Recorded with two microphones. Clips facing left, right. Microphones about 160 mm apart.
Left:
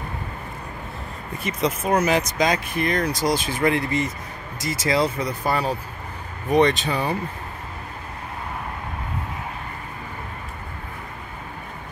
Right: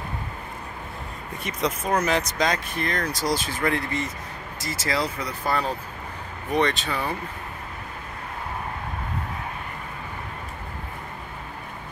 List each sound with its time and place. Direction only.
1.4 s speech: 5° left (ahead or behind)